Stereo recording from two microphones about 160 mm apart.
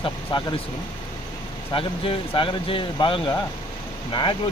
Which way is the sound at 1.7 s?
35° left (ahead or behind).